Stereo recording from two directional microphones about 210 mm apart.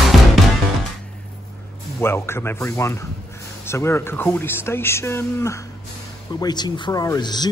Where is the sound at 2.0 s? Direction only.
10° left (ahead or behind).